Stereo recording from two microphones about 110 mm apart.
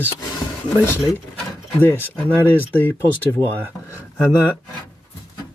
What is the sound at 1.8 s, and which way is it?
Speech, 15° left (ahead or behind).